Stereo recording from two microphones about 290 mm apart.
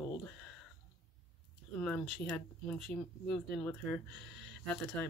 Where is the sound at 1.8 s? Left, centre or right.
Centre.